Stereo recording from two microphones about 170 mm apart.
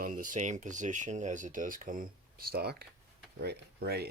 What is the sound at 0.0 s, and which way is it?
Speech, 55° right (ahead or behind).